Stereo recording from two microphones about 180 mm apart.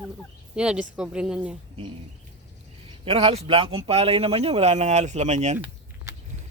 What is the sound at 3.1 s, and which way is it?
Speech, 30° right (ahead or behind).